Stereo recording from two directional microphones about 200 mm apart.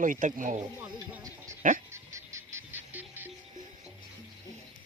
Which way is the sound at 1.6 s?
40° right (ahead or behind).